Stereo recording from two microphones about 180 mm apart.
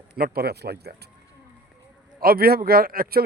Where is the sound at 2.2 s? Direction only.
55° right (ahead or behind).